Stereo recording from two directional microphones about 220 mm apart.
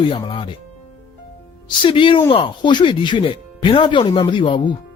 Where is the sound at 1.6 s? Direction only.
20° left (ahead or behind).